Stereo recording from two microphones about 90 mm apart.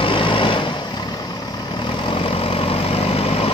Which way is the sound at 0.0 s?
75° left (ahead or behind).